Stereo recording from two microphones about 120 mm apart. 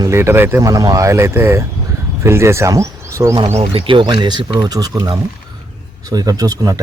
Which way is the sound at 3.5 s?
55° right (ahead or behind).